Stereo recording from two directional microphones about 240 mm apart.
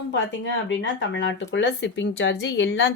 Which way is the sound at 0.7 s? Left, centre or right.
Left.